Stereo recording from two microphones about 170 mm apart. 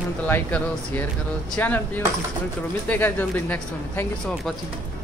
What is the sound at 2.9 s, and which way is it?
Speech, 10° left (ahead or behind).